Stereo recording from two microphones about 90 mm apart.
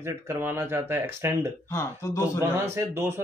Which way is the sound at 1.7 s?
30° left (ahead or behind).